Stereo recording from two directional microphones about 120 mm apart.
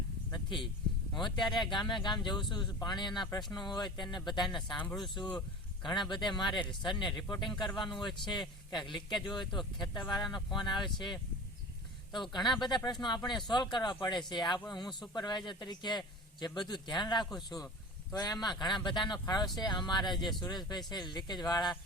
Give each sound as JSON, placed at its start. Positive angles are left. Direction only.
{"t": 0.3, "sound": "a sound", "side_deg": 35}
{"t": 1.1, "sound": "a man's voice", "side_deg": 40}
{"t": 12.3, "sound": "a man's voice", "side_deg": 40}